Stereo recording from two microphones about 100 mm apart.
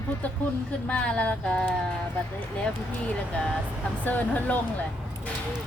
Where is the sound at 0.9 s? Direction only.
10° left (ahead or behind).